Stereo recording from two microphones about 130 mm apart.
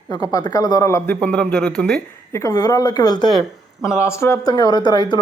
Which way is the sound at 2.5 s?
30° left (ahead or behind).